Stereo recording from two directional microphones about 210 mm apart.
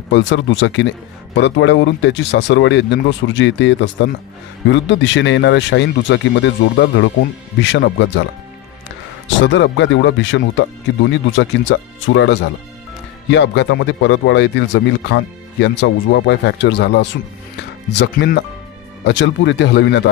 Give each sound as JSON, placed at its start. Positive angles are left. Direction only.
{"t": 0.1, "sound": "a man's voice", "side_deg": 60}
{"t": 9.4, "sound": "a man's voice", "side_deg": 60}